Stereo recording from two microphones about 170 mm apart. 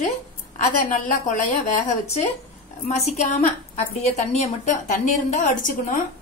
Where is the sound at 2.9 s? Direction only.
40° left (ahead or behind).